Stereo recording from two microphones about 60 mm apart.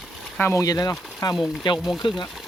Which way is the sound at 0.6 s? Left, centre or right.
Left.